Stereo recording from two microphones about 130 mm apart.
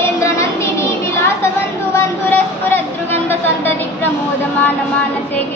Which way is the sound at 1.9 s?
15° left (ahead or behind).